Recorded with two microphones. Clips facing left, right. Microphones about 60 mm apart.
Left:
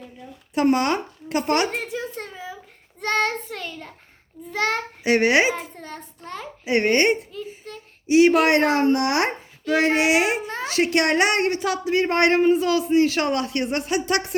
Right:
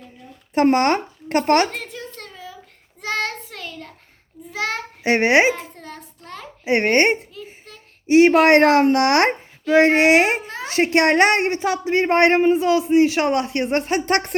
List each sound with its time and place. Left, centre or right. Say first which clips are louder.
0.5 s speech: right 3 dB; right
1.6 s a sound: left 2 dB; centre
3.0 s child singing: left 2 dB; centre
5.0 s speech: right 2 dB; right
5.5 s child singing: left 1 dB; centre
6.7 s speech: right 2 dB; right
7.3 s a sound: left 4 dB; centre
8.0 s speech: right 3 dB; right
8.6 s a child's voice: right 5 dB; right
9.7 s speech: right 5 dB; right
10.4 s a child's voice: left 2 dB; centre
10.7 s a woman's voice: right 4 dB; right